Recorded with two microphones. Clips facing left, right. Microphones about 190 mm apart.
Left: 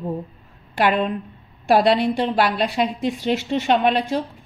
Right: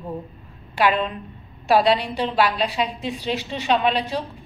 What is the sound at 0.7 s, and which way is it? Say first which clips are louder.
A woman's voice: left 1 dB; 60° left (ahead or behind).